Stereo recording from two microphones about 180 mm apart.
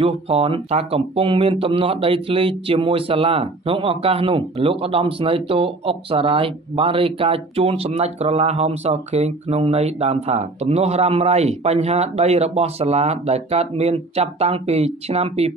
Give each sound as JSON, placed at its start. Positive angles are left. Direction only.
{"t": 0.0, "sound": "speech", "side_deg": -30}